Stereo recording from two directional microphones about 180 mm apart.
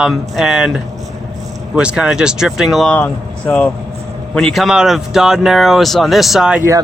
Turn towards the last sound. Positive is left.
turn(degrees=-5)  # may be behind; listen again after turning